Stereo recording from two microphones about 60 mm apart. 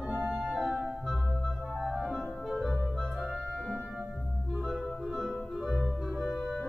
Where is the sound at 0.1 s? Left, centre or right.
Right.